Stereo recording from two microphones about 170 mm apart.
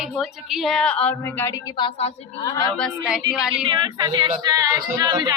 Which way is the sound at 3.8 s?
25° right (ahead or behind).